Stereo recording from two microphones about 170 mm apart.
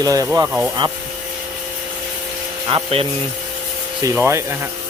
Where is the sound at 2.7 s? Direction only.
35° right (ahead or behind).